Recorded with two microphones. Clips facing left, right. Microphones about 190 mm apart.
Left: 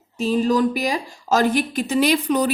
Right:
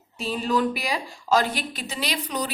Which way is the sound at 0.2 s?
45° left (ahead or behind).